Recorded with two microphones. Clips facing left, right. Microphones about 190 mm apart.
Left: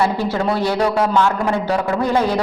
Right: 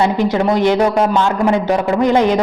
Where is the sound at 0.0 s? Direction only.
20° right (ahead or behind).